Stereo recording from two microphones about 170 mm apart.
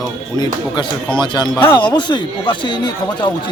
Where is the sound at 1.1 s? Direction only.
25° left (ahead or behind).